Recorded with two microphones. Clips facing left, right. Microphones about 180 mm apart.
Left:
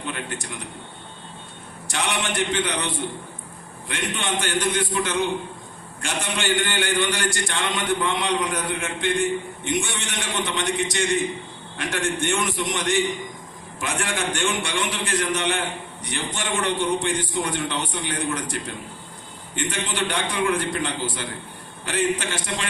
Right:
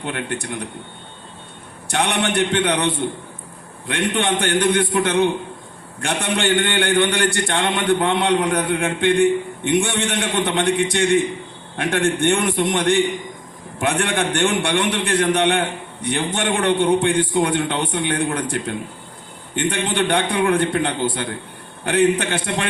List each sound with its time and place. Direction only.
0.0 s a man's voice: 60° right (ahead or behind)
1.9 s a man's voice: 60° right (ahead or behind)